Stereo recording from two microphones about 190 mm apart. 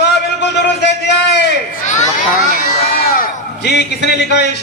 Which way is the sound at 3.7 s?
60° left (ahead or behind).